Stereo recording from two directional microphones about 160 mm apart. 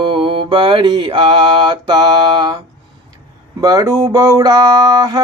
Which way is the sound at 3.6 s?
20° right (ahead or behind).